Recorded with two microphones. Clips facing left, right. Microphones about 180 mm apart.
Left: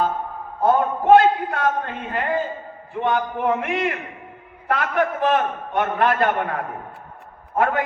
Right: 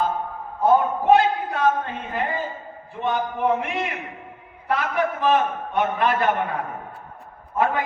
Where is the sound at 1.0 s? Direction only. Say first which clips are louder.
Left 3 dB; 55° left (ahead or behind).